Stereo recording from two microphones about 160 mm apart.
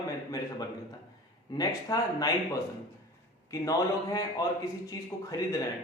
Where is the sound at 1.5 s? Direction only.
25° left (ahead or behind).